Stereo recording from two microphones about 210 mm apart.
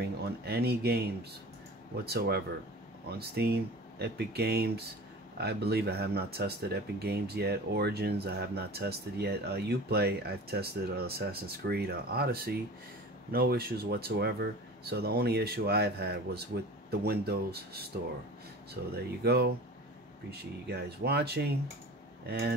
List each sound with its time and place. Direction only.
0.0 s speech: 50° right (ahead or behind)
2.0 s speech: 50° right (ahead or behind)